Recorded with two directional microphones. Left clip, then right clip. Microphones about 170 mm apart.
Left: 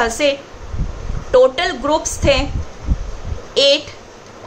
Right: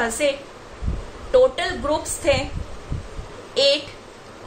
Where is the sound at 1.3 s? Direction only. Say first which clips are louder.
Left 5 dB; 30° left (ahead or behind).